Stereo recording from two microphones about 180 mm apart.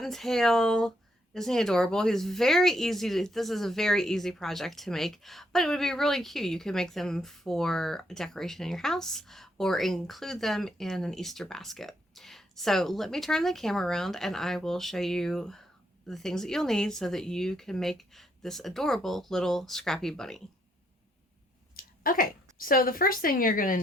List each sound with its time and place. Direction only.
0.0 s speech: centre (ahead or behind)
21.8 s a sound: 50° left (ahead or behind)
22.5 s a woman's voice: 55° left (ahead or behind)